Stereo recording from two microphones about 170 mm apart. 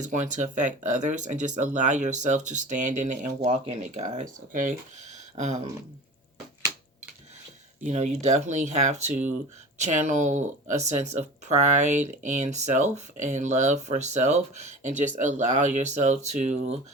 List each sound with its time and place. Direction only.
0.0 s speech: 45° right (ahead or behind)
7.9 s speech: 45° right (ahead or behind)